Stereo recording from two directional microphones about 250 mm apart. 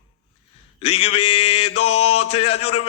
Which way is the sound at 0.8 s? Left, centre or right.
Left.